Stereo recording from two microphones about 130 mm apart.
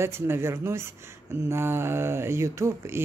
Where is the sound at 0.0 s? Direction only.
20° right (ahead or behind).